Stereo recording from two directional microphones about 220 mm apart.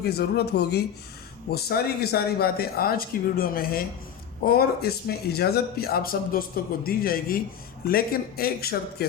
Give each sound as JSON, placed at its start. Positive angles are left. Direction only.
{"t": 0.0, "sound": "a man's voice", "side_deg": 45}